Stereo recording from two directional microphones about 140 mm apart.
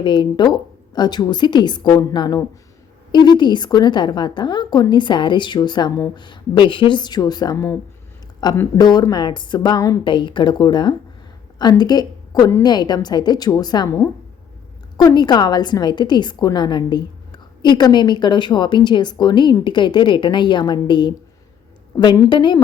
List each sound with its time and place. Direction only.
0.0 s a woman's voice: 35° left (ahead or behind)
12.6 s a woman's voice: 30° left (ahead or behind)